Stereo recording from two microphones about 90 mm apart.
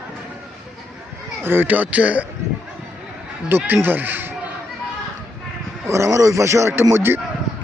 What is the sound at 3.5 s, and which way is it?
Speech, 25° right (ahead or behind).